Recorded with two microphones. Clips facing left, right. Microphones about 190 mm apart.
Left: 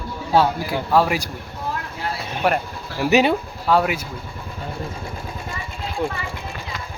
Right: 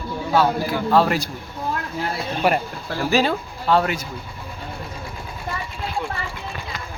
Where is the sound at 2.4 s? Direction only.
5° right (ahead or behind).